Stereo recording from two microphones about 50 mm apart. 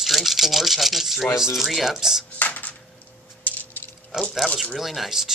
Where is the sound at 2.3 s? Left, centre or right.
Left.